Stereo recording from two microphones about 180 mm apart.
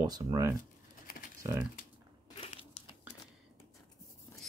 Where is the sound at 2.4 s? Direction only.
35° left (ahead or behind).